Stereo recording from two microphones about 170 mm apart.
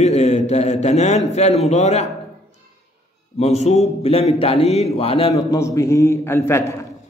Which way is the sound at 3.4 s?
40° left (ahead or behind).